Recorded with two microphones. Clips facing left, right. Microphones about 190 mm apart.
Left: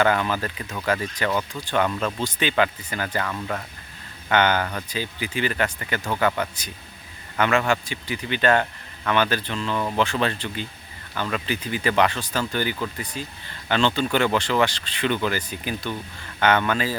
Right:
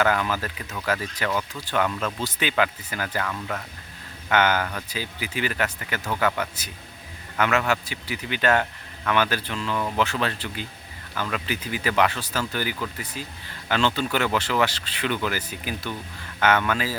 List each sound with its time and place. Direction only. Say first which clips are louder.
0.0 s speech: left 2 dB; 5° right (ahead or behind)
4.3 s a man's voice: left 1 dB; 5° right (ahead or behind)